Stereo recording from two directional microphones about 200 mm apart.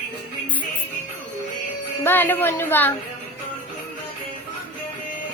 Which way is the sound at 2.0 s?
10° left (ahead or behind).